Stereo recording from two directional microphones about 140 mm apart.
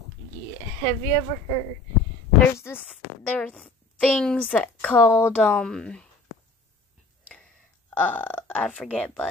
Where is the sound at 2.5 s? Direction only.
20° left (ahead or behind).